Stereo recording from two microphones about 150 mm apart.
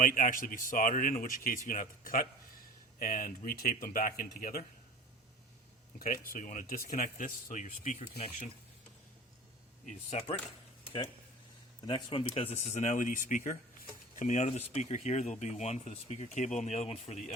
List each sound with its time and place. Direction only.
0.0 s speech: 65° left (ahead or behind)
6.0 s speech: 70° left (ahead or behind)
10.1 s speech: 45° left (ahead or behind)
10.8 s a sound: 35° left (ahead or behind)
11.9 s speech: 35° left (ahead or behind)